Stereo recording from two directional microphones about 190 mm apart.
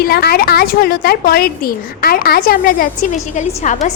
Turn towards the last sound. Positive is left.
turn(degrees=40)  # may be behind; listen again after turning